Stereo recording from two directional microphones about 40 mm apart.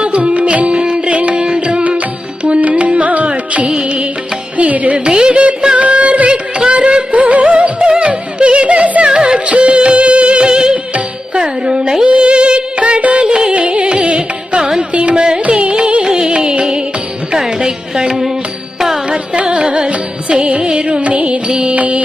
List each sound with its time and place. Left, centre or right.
0.0 s music: right
3.7 s music: right
4.5 s music: right
4.9 s music: right
9.1 s music: centre
14.6 s music: centre
14.9 s carnatic music: right
16.0 s music: centre
17.3 s carnatic music: centre
19.1 s carnatic music: right
20.3 s music: right
21.8 s music: right